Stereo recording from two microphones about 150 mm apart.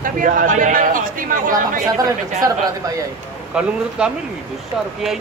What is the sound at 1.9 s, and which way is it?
Speech, 25° right (ahead or behind).